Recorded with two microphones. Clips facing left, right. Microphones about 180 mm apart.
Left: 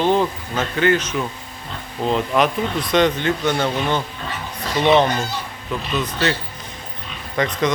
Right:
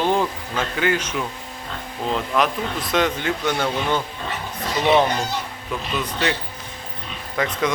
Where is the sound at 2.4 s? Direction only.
5° right (ahead or behind).